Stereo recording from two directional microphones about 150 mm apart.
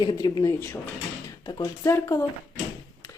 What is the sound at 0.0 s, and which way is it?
Speech, 30° left (ahead or behind).